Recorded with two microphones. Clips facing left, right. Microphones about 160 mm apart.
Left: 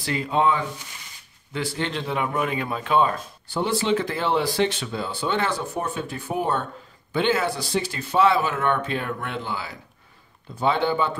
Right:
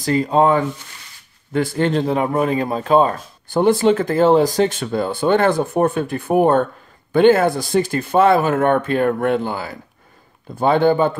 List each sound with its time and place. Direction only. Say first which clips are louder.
0.0 s speech: right 7 dB; 40° right (ahead or behind)